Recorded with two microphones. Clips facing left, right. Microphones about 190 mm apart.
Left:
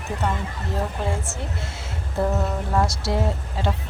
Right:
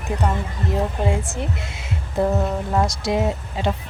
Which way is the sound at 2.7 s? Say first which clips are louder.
Right 2 dB; 15° right (ahead or behind).